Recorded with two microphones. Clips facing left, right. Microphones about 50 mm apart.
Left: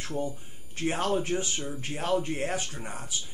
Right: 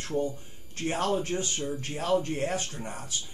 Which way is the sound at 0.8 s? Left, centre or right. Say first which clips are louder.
Even; left.